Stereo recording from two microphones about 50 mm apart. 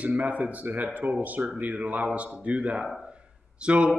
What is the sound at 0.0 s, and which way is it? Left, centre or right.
A man's voice, right.